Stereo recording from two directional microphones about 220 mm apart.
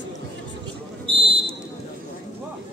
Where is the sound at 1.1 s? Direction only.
25° right (ahead or behind).